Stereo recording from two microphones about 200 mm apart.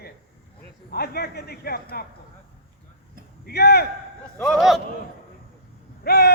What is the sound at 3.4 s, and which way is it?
Speech, 50° left (ahead or behind).